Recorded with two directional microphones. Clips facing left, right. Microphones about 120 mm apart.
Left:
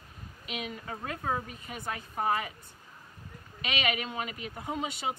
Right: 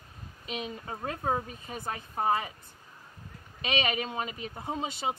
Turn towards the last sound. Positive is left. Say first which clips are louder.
# right 1 dB
turn(degrees=-30)  # may be behind; listen again after turning